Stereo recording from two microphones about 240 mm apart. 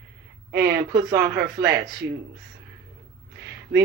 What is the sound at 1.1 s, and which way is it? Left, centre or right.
Speech, centre.